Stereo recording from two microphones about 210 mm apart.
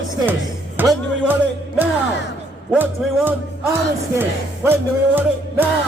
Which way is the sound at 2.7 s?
10° right (ahead or behind).